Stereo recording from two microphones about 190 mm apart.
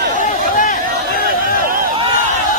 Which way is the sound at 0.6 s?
45° left (ahead or behind).